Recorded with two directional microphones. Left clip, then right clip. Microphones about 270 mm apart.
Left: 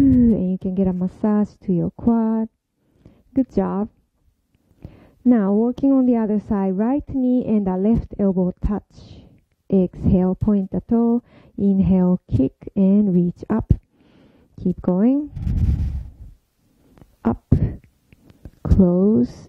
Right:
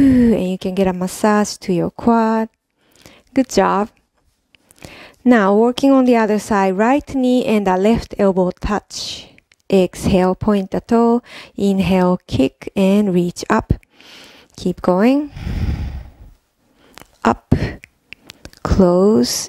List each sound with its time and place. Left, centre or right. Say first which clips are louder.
0.0 s a woman's voice: right 3 dB; centre
3.0 s a sound: right 4 dB; centre
4.7 s a woman's voice: right 11 dB; centre
8.3 s a woman's voice: right 6 dB; centre
8.5 s a woman's voice: right 8 dB; centre
13.6 s a sound: right 7 dB; centre
14.8 s a woman's voice: right 6 dB; centre
16.9 s a sound: right 8 dB; centre
18.7 s a woman's voice: right 6 dB; centre